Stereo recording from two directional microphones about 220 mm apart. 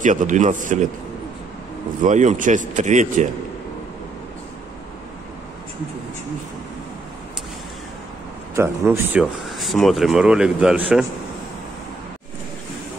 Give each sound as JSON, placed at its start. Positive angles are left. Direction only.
{"t": 0.0, "sound": "a man's voice", "side_deg": -35}
{"t": 2.0, "sound": "a man's voice", "side_deg": -35}
{"t": 8.5, "sound": "speech", "side_deg": -10}